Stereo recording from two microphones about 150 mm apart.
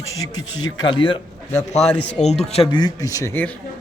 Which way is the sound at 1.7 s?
45° left (ahead or behind).